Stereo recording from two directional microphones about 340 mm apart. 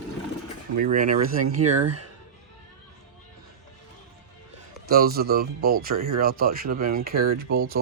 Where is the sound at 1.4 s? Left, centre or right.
Right.